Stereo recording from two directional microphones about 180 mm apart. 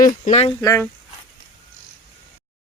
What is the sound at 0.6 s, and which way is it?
Speech, 15° left (ahead or behind).